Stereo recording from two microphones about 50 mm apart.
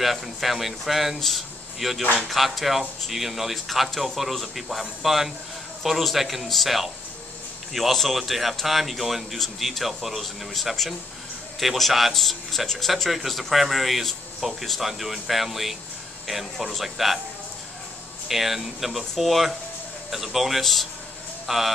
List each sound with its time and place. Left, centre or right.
0.0 s speech: centre
18.3 s speech: centre